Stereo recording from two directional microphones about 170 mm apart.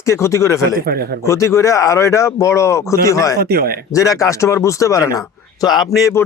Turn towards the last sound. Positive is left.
turn(degrees=20)  # may be behind; listen again after turning